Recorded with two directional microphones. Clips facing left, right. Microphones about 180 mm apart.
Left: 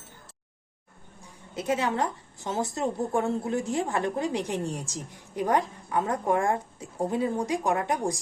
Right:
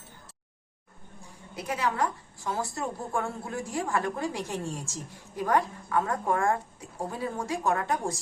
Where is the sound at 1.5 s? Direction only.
25° left (ahead or behind).